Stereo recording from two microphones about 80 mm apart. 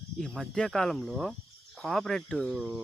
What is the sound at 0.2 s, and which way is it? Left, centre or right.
Speech, centre.